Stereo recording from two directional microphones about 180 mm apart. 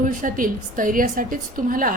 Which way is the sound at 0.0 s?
50° right (ahead or behind).